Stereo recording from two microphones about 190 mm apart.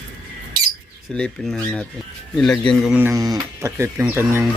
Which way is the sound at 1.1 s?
5° left (ahead or behind).